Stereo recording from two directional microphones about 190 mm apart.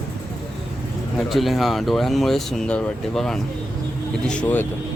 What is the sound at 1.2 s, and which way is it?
Speech, centre (ahead or behind).